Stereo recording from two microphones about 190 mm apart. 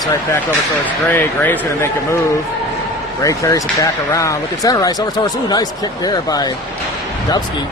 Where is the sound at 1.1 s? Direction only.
10° left (ahead or behind).